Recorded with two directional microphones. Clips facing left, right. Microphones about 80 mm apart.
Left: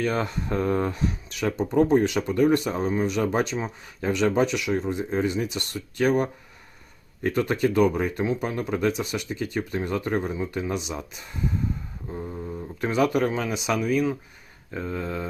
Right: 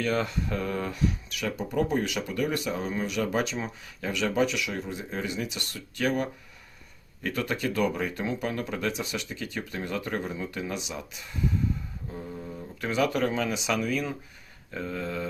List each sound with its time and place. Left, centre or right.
0.0 s speech: left
12.8 s speech: left